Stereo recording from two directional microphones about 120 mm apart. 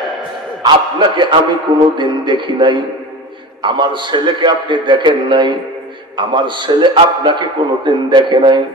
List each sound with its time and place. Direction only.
0.6 s a man's voice: 40° right (ahead or behind)